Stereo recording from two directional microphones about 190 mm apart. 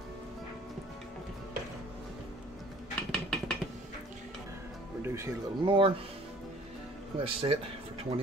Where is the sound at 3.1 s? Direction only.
5° left (ahead or behind).